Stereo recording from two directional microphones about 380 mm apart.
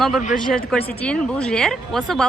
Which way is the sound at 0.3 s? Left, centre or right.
Centre.